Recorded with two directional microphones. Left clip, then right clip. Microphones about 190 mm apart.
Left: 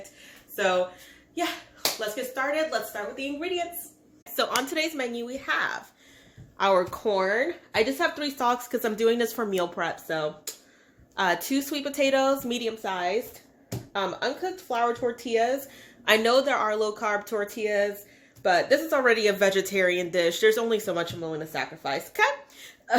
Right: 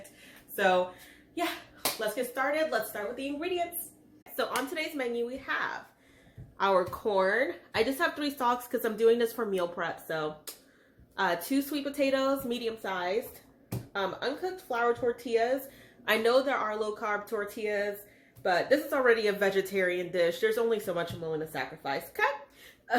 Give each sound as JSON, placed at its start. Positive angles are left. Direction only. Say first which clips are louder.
{"t": 0.5, "sound": "speech", "louder": "left 1 dB", "side_deg": 0}
{"t": 4.4, "sound": "speech", "louder": "left 6 dB", "side_deg": 50}
{"t": 6.6, "sound": "a woman's voice", "louder": "left 4 dB", "side_deg": 35}